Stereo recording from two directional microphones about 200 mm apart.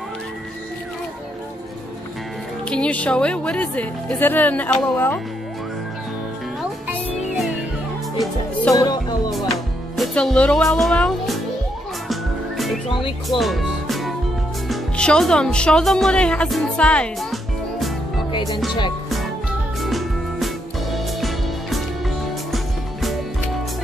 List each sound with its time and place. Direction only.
2.7 s speech: 5° left (ahead or behind)
8.7 s music: 20° left (ahead or behind)
9.5 s music: centre (ahead or behind)
12.8 s speech: 25° left (ahead or behind)
13.3 s music: centre (ahead or behind)
14.7 s a woman's voice: 5° left (ahead or behind)
19.8 s music: centre (ahead or behind)